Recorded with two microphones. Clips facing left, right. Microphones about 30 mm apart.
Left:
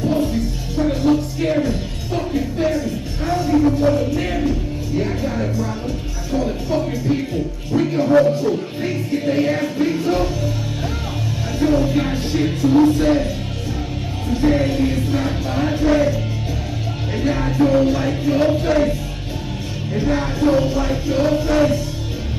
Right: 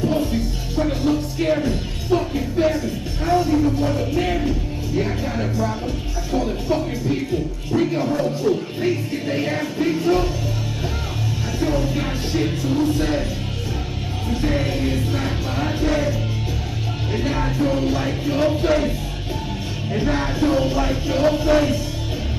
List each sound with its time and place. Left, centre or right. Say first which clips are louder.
0.0 s music: left 2 dB; centre
11.6 s music: left 5 dB; centre
14.3 s music: left 5 dB; centre